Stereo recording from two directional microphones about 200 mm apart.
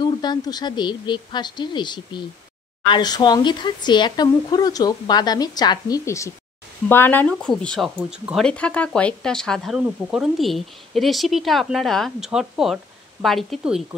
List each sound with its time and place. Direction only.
0.0 s speech: 20° left (ahead or behind); by 13.8 s centre (ahead or behind)